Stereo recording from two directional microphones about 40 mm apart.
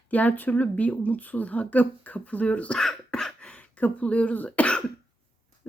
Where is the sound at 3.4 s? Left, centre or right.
Left.